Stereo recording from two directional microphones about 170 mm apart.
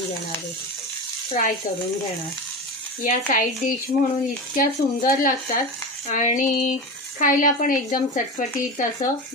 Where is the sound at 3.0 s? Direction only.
50° left (ahead or behind).